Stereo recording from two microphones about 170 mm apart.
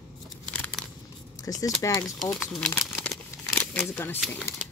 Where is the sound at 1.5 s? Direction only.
20° left (ahead or behind).